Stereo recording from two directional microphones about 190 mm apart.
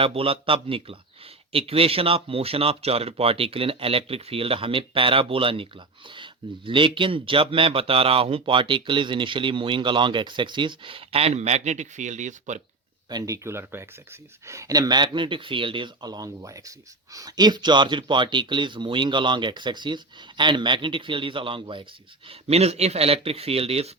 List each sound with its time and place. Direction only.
0.0 s speech: 30° right (ahead or behind)
13.1 s speech: 20° right (ahead or behind)